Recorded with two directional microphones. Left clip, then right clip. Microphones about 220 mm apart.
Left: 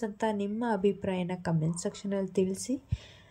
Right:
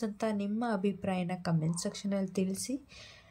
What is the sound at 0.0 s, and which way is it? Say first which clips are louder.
Speech: left 3 dB; 10° left (ahead or behind).